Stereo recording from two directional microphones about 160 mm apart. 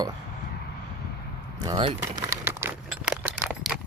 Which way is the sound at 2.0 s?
15° right (ahead or behind).